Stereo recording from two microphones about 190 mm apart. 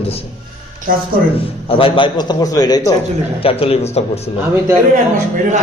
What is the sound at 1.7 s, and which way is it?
A man's voice, 30° left (ahead or behind).